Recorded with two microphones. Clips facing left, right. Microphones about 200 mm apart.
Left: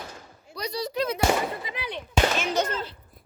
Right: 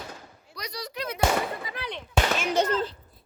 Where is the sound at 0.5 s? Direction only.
30° left (ahead or behind).